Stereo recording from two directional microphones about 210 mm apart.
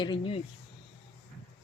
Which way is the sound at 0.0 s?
25° left (ahead or behind).